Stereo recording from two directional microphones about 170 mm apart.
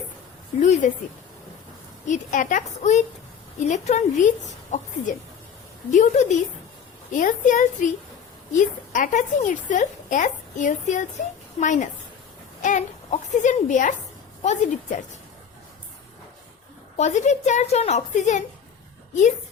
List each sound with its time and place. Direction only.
0.6 s a woman's voice: 45° left (ahead or behind)
2.0 s a woman's voice: 50° left (ahead or behind)
5.9 s a woman's voice: 45° left (ahead or behind)
17.0 s a woman's voice: 45° left (ahead or behind)